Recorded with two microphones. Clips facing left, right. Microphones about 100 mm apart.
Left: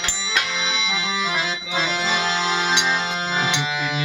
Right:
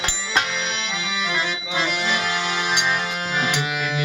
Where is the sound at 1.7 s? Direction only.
25° left (ahead or behind).